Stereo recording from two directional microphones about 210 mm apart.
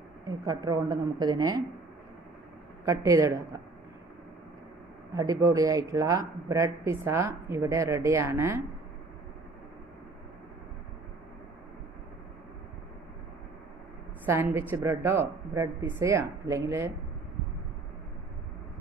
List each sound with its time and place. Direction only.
0.3 s a woman's voice: 20° right (ahead or behind)
2.8 s speech: 15° right (ahead or behind)
5.1 s speech: 15° right (ahead or behind)
14.2 s speech: 10° right (ahead or behind)